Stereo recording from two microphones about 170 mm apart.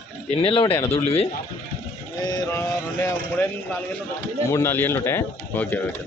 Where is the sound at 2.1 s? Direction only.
20° left (ahead or behind).